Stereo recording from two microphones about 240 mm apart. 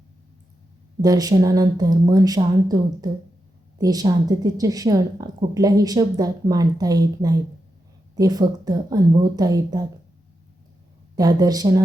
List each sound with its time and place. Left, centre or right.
1.0 s a woman's voice: centre
11.1 s a woman's voice: centre